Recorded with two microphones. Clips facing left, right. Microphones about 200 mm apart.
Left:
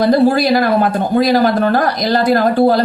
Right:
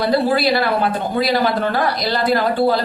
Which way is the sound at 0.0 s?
45° left (ahead or behind).